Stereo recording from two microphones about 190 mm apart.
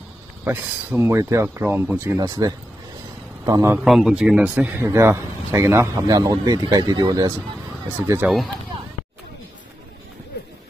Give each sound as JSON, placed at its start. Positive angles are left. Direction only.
{"t": 0.5, "sound": "speech", "side_deg": -10}
{"t": 3.8, "sound": "speech", "side_deg": 0}
{"t": 8.2, "sound": "speech", "side_deg": -10}